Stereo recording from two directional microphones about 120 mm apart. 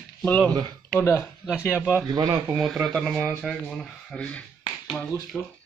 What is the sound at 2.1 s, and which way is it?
Speech, 30° right (ahead or behind).